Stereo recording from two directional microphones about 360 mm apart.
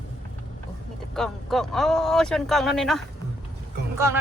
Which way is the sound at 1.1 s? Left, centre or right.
Centre.